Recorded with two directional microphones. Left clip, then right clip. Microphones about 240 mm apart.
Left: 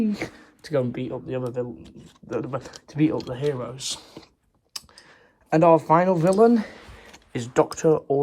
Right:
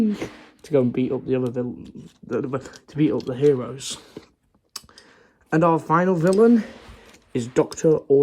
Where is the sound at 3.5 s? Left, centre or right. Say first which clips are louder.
Right 6 dB; right.